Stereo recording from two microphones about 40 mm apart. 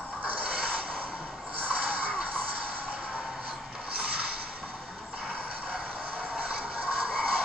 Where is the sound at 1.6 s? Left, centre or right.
Right.